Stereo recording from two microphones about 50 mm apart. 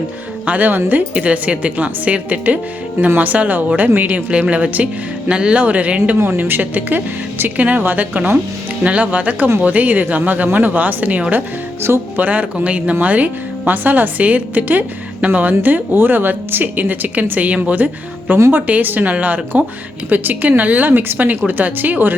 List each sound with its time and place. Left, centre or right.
0.4 s a woman's voice: right
4.3 s a woman's voice: right
6.1 s speech: right
7.5 s a woman's voice: right
12.5 s a woman's voice: right